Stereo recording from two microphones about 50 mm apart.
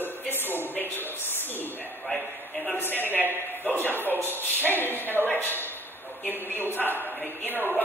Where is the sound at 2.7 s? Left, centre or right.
Left.